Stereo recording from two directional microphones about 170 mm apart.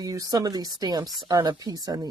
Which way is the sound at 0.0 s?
20° right (ahead or behind).